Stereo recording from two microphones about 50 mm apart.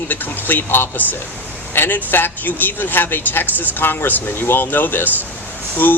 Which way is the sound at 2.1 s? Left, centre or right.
Left.